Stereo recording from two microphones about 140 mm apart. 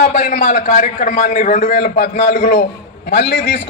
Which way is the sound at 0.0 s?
80° left.